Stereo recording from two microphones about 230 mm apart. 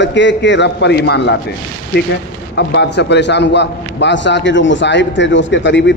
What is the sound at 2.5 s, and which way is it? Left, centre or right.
A man's voice, left.